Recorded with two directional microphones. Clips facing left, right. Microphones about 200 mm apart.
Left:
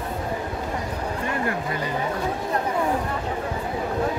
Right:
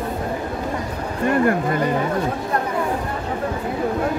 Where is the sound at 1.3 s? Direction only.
50° right (ahead or behind).